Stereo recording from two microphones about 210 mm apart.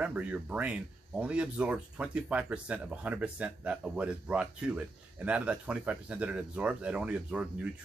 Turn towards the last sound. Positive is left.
turn(degrees=-5)  # may be behind; listen again after turning